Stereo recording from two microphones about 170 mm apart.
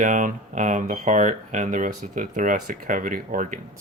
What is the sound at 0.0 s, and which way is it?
Speech, 50° right (ahead or behind).